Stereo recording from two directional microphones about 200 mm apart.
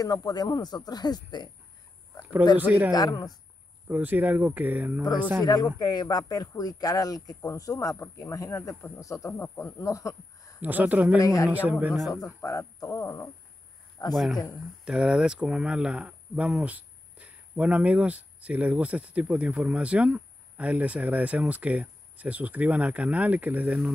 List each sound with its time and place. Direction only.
0.0 s speech: 20° left (ahead or behind)
2.6 s speech: 10° right (ahead or behind)
2.9 s speech: 20° left (ahead or behind)
3.8 s speech: 10° right (ahead or behind)
5.4 s speech: 20° left (ahead or behind)
10.6 s speech: 10° right (ahead or behind)
11.1 s speech: 15° left (ahead or behind)
11.4 s a man's voice: 10° right (ahead or behind)
12.4 s speech: 15° left (ahead or behind)
14.1 s a man's voice: centre (ahead or behind)